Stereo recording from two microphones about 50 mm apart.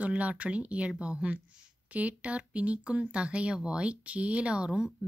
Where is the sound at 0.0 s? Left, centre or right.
Right.